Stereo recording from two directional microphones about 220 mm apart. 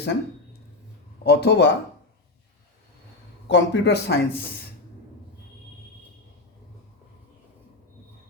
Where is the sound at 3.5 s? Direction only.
55° left (ahead or behind).